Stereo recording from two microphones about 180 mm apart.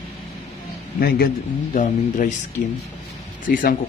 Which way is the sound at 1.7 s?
45° left (ahead or behind).